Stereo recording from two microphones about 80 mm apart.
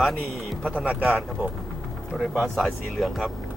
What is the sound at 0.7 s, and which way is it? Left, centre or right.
Speech, centre.